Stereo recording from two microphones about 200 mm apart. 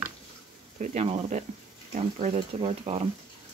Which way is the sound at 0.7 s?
35° right (ahead or behind).